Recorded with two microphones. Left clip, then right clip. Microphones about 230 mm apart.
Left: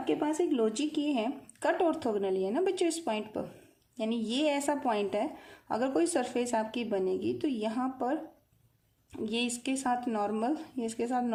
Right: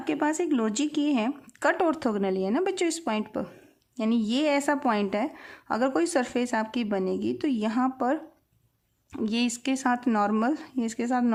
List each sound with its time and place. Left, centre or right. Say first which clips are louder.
0.0 s a woman's voice: right 3 dB; right
9.1 s a woman's voice: right 4 dB; right